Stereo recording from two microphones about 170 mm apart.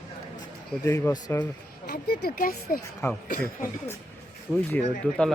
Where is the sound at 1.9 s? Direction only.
60° left (ahead or behind).